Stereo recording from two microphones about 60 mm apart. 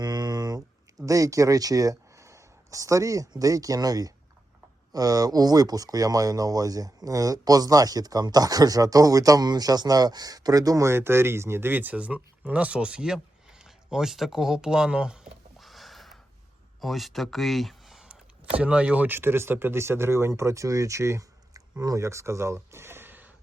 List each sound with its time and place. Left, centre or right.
0.2 s a sound: right
1.0 s speech: right
10.8 s speech: right; by 15.3 s centre
15.5 s a sound: centre
16.8 s speech: centre
18.5 s speech: centre
19.0 s speech: right
21.5 s a sound: right
22.0 s speech: right